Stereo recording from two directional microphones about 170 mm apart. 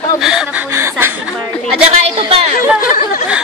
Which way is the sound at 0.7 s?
15° right (ahead or behind).